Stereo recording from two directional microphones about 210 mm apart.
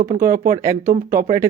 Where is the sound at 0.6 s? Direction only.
15° right (ahead or behind).